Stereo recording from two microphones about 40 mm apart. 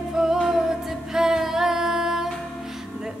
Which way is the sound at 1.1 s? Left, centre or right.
Centre.